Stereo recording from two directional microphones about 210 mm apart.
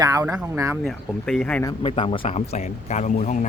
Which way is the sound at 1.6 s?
25° left (ahead or behind).